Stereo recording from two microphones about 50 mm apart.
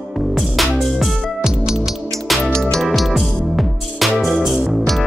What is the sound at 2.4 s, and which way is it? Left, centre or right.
Music, centre.